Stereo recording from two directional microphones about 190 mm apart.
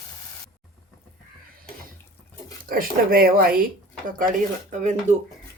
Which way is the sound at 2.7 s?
50° right (ahead or behind).